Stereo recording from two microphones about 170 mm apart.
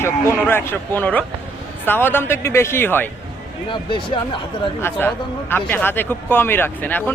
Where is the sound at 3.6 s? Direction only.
30° left (ahead or behind).